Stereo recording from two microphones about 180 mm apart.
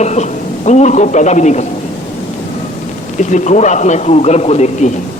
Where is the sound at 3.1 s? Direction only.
40° left (ahead or behind).